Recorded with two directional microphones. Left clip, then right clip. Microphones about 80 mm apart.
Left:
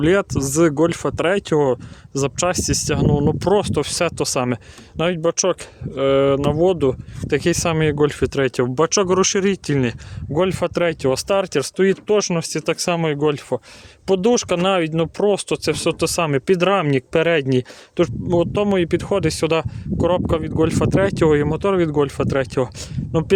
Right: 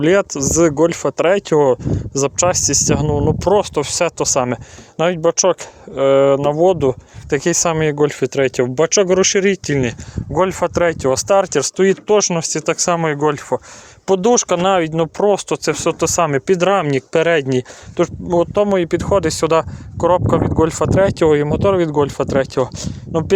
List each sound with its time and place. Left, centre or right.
0.0 s speech: left
3.1 s speech: left
4.9 s speech: left
10.3 s speech: left
10.8 s speech: left
11.4 s speech: centre
13.0 s speech: left
17.9 s speech: left